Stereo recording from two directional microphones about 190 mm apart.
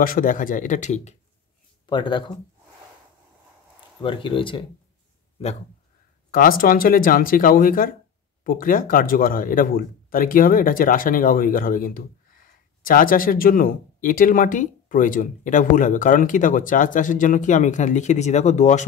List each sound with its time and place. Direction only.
0.0 s speech: 45° left (ahead or behind)
1.9 s speech: 25° left (ahead or behind)
4.0 s speech: 25° left (ahead or behind)
6.3 s speech: 50° left (ahead or behind)